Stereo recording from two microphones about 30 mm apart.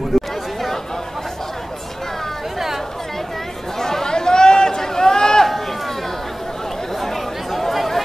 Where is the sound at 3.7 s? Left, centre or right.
Centre.